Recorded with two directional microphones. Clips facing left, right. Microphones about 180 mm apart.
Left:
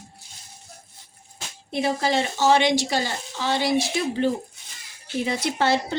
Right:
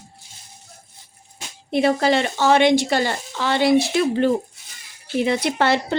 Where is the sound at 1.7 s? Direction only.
65° right (ahead or behind).